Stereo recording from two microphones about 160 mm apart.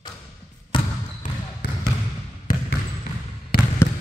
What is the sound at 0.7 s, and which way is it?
Trickle, 30° left (ahead or behind).